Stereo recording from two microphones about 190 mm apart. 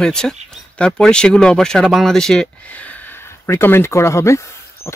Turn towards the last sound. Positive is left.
turn(degrees=15)  # may be behind; listen again after turning